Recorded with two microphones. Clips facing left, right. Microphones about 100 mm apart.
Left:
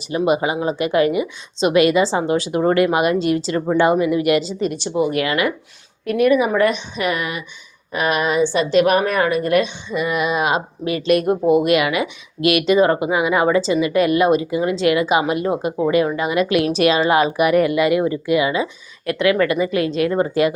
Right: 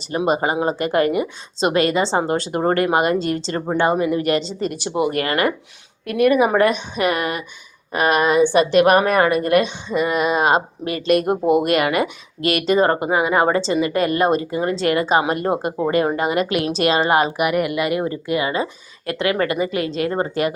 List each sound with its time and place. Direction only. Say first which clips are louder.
0.3 s a woman's voice: even; 40° right (ahead or behind)
4.6 s speech: left 1 dB; 50° right (ahead or behind)
5.1 s a woman's voice: even; 45° right (ahead or behind)
17.3 s a woman's voice: left 4 dB; 20° right (ahead or behind)